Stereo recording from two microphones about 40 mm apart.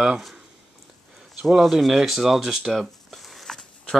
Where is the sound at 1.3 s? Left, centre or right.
Centre.